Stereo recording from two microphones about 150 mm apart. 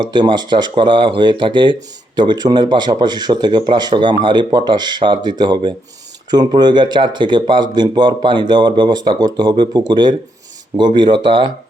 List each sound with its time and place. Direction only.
0.0 s speech: 30° right (ahead or behind)